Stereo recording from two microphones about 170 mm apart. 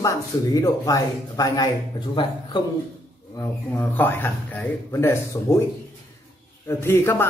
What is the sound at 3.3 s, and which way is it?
Speech, 15° left (ahead or behind).